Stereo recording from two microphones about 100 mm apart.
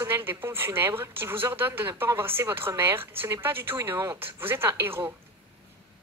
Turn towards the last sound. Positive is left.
turn(degrees=-20)  # may be behind; listen again after turning